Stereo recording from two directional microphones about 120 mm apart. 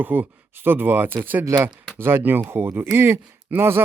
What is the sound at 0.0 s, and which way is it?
Speech, 15° right (ahead or behind).